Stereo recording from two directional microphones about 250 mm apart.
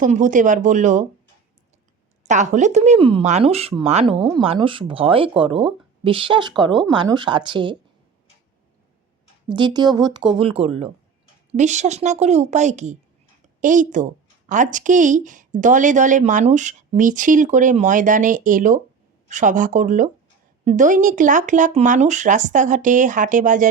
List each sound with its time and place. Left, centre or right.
0.0 s speech: right
2.2 s speech: right
9.5 s a woman's voice: centre